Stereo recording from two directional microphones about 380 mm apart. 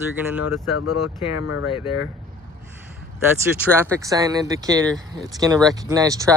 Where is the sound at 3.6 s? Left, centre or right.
Centre.